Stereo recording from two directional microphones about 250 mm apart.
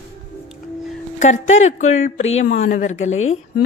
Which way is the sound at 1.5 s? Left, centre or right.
Left.